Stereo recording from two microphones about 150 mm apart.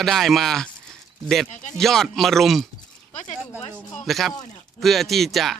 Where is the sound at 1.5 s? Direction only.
55° left (ahead or behind).